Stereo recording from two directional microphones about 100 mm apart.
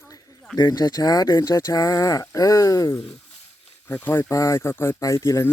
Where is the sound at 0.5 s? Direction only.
40° left (ahead or behind).